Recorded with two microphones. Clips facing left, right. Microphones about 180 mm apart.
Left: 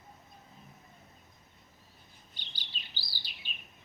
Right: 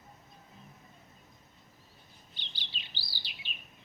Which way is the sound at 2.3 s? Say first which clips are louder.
Right 1 dB; 45° left (ahead or behind).